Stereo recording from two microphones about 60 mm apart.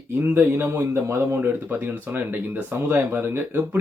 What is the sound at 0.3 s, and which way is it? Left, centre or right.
Speech, right.